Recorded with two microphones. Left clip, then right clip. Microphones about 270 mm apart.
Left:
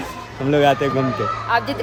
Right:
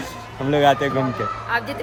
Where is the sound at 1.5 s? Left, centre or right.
Centre.